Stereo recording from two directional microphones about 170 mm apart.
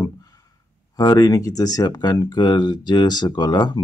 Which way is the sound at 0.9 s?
20° left (ahead or behind).